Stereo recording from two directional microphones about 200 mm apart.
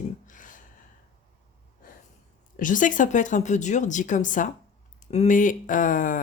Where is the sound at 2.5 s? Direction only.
40° left (ahead or behind).